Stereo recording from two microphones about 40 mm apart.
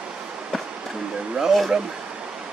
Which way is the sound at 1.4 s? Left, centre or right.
Centre.